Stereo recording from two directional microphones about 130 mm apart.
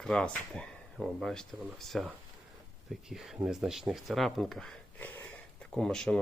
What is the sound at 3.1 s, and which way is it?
Speech, 5° right (ahead or behind).